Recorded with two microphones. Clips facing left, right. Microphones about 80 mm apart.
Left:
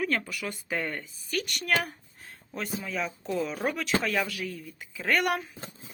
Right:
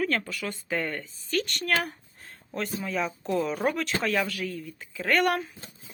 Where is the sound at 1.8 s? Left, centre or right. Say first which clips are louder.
Right 2 dB; centre.